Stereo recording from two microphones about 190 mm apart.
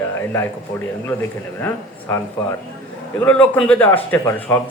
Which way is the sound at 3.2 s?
10° left (ahead or behind).